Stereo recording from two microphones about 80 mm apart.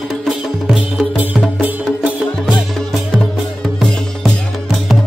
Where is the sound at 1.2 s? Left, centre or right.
Centre.